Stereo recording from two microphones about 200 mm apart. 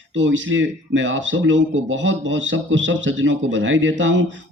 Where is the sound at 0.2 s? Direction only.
65° right (ahead or behind).